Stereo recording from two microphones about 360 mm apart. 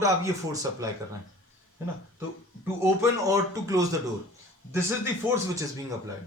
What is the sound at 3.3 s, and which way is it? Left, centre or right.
Speech, centre.